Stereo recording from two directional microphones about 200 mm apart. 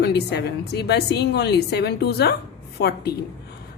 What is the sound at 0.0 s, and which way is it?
A woman's voice, 55° left (ahead or behind).